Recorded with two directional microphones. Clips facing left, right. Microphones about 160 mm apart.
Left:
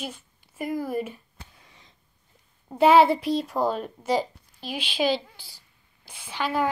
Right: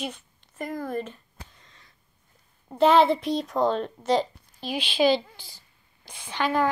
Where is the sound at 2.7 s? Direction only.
10° left (ahead or behind).